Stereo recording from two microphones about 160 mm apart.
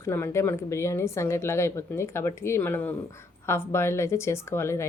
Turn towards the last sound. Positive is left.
turn(degrees=15)  # may be behind; listen again after turning